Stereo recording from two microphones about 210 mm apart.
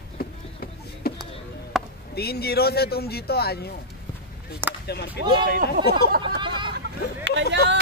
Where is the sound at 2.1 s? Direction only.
50° left (ahead or behind).